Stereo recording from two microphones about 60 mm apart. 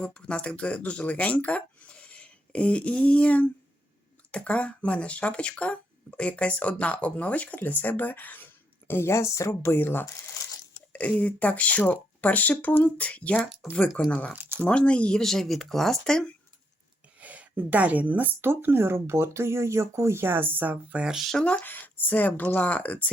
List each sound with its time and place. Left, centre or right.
0.0 s speech: centre; by 8.4 s left
8.9 s speech: left
9.7 s speech: left
10.8 s speech: left
15.2 s speech: centre
17.2 s speech: right
21.0 s speech: centre
21.6 s speech: left